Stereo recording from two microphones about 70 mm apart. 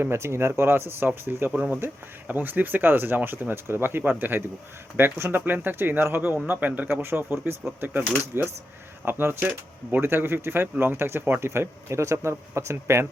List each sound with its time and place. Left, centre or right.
0.0 s speech: right